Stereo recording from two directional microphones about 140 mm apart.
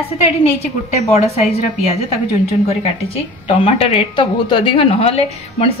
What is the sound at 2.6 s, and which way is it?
A woman's voice, 45° left (ahead or behind).